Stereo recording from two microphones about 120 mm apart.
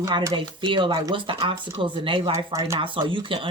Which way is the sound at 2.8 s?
45° right (ahead or behind).